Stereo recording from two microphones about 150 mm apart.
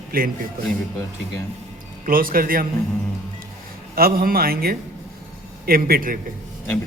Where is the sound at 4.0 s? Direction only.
80° right.